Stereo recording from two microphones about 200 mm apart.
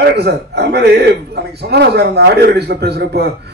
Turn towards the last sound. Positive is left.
turn(degrees=-55)  # may be behind; listen again after turning